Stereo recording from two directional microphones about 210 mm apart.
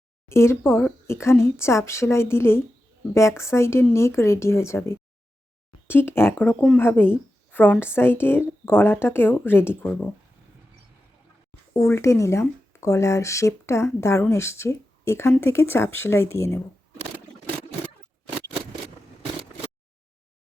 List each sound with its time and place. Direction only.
0.3 s speech: 10° left (ahead or behind)
5.9 s speech: 10° left (ahead or behind)
11.7 s speech: 15° left (ahead or behind)